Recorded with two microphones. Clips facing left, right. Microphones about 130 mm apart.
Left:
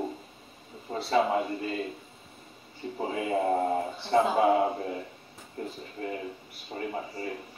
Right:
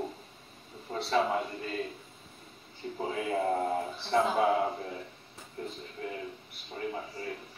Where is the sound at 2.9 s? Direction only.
20° left (ahead or behind).